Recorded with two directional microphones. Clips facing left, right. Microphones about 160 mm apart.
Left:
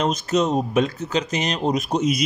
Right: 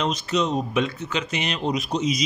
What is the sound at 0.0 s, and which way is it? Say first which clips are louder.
Speech: left 3 dB; 45° left (ahead or behind).